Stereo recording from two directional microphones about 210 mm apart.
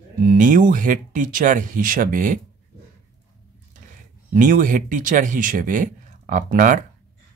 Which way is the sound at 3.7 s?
40° right (ahead or behind).